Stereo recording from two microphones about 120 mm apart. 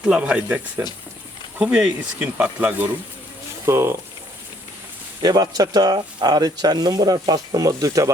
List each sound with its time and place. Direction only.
0.0 s speech: 10° right (ahead or behind)
5.2 s speech: 35° right (ahead or behind)